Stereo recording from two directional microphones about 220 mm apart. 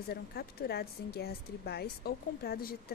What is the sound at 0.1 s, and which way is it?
Speech, 45° left (ahead or behind).